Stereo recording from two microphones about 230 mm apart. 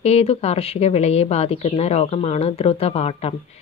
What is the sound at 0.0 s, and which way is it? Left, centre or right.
Speech, left.